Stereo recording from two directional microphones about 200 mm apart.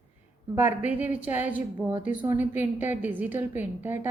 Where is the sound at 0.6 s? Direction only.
35° left (ahead or behind).